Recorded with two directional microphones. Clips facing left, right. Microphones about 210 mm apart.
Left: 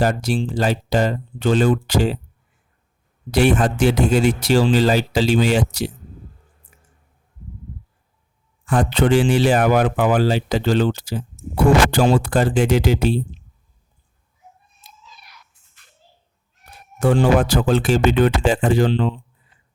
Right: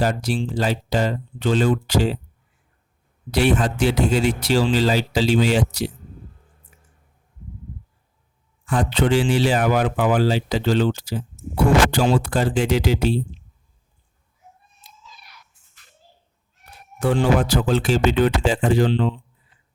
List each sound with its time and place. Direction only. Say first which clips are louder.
0.0 s a man's voice: left 2 dB; 45° left (ahead or behind)
3.3 s a man's voice: left 3 dB; 50° left (ahead or behind)
8.6 s a man's voice: left 3 dB; 50° left (ahead or behind)
17.0 s a man's voice: left 3 dB; 45° left (ahead or behind)